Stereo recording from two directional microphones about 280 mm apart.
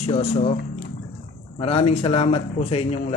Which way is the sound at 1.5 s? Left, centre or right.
Centre.